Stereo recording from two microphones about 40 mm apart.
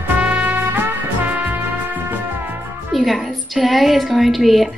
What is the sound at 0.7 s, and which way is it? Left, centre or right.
Music, right.